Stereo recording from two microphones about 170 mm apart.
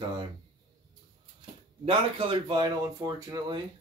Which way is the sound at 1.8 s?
35° right (ahead or behind).